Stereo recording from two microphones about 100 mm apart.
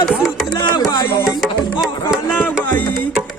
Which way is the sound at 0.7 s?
45° left (ahead or behind).